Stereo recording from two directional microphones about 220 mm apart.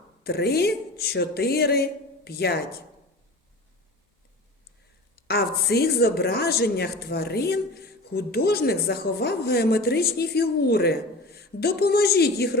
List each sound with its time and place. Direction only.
0.2 s speech: 45° left (ahead or behind)
5.1 s speech: 45° left (ahead or behind)